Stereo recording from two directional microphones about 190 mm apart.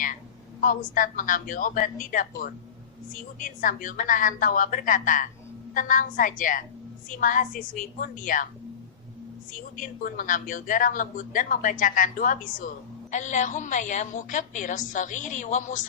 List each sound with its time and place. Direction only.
0.6 s speech: 45° left (ahead or behind)
10.0 s a woman's voice: 45° left (ahead or behind)